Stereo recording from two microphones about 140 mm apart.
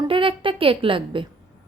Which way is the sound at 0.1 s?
40° right (ahead or behind).